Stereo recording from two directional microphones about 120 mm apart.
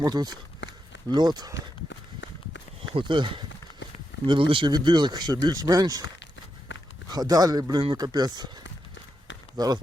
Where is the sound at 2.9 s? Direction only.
40° right (ahead or behind).